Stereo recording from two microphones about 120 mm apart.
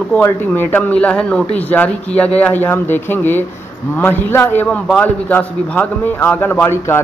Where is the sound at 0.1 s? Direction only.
15° left (ahead or behind).